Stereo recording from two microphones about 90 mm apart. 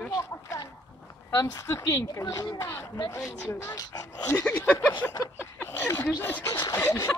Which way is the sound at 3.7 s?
45° left (ahead or behind).